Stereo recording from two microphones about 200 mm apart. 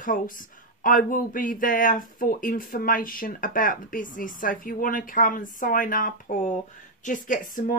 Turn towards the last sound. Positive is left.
turn(degrees=40)  # may be behind; listen again after turning